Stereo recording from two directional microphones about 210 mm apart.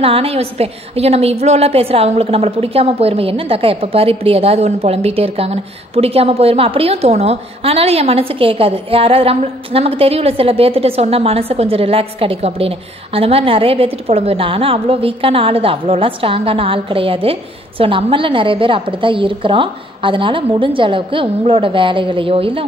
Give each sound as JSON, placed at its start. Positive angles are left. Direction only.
{"t": 0.0, "sound": "a woman's voice", "side_deg": -25}